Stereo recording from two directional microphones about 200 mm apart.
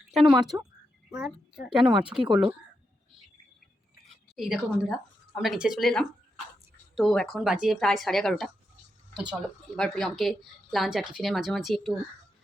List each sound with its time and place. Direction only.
0.1 s speech: centre (ahead or behind)
0.3 s speech: 20° right (ahead or behind)
1.1 s speech: 5° right (ahead or behind)
4.4 s speech: centre (ahead or behind)